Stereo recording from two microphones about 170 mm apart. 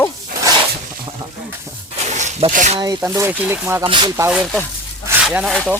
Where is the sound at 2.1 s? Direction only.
45° right (ahead or behind).